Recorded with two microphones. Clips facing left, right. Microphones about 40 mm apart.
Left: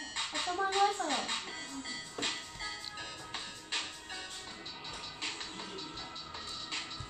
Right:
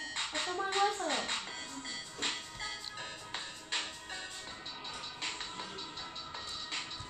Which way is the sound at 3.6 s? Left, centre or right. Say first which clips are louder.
Right 1 dB; centre.